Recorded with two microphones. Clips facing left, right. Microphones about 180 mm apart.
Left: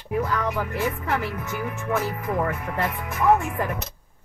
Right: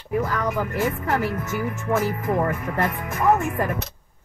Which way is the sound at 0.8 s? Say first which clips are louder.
Right 3 dB; 45° right (ahead or behind).